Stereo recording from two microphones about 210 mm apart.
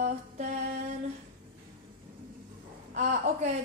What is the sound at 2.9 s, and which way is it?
Mantra, 35° right (ahead or behind).